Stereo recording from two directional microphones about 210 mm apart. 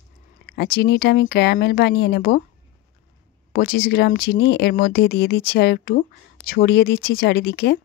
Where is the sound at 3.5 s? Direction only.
45° left (ahead or behind).